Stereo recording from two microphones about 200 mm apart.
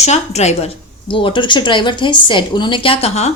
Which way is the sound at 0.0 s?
35° left (ahead or behind).